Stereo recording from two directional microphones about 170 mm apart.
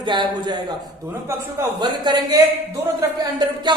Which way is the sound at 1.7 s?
25° right (ahead or behind).